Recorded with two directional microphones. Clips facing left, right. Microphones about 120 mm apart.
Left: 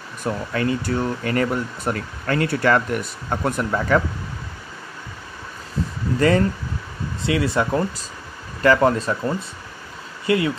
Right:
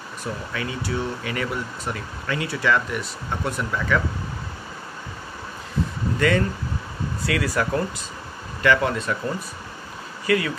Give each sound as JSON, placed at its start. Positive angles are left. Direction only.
{"t": 0.2, "sound": "speech", "side_deg": 50}
{"t": 6.1, "sound": "speech", "side_deg": 35}
{"t": 7.2, "sound": "speech", "side_deg": 25}
{"t": 8.6, "sound": "speech", "side_deg": 35}
{"t": 10.2, "sound": "speech", "side_deg": 25}